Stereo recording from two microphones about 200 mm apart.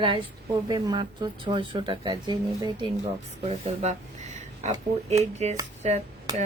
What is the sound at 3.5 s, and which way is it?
Speech, 35° right (ahead or behind).